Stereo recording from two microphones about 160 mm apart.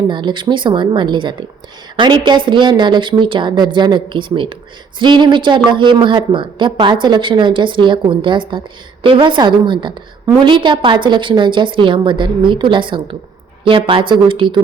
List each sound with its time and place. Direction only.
0.1 s a woman's voice: 30° right (ahead or behind)